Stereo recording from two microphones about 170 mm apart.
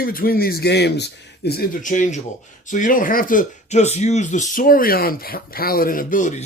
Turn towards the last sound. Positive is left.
turn(degrees=50)  # may be behind; listen again after turning